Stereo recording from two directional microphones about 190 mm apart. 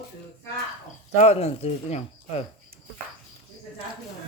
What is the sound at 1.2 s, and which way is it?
Speech, 35° left (ahead or behind).